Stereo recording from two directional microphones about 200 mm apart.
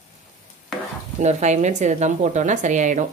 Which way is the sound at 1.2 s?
35° right (ahead or behind).